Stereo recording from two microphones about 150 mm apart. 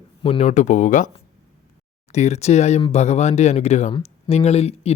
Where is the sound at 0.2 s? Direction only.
40° left (ahead or behind); by 1.1 s 60° left (ahead or behind).